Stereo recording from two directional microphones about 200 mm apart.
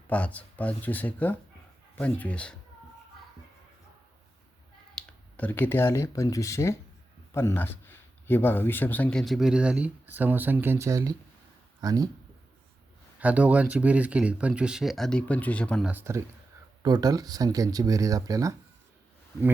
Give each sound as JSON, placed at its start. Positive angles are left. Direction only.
{"t": 0.1, "sound": "speech", "side_deg": 5}
{"t": 4.9, "sound": "speech", "side_deg": 10}
{"t": 13.1, "sound": "speech", "side_deg": -5}
{"t": 15.9, "sound": "speech", "side_deg": -10}